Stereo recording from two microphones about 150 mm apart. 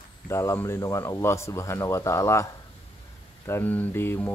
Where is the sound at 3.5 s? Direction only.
10° left (ahead or behind).